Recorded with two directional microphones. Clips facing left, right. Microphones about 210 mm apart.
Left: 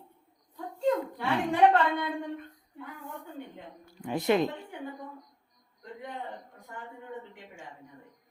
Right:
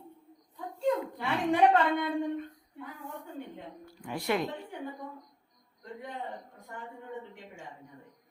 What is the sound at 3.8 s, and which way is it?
Speech, 20° left (ahead or behind).